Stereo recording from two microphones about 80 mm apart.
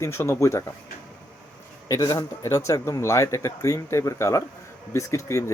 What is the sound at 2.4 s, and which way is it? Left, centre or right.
A man's voice, left.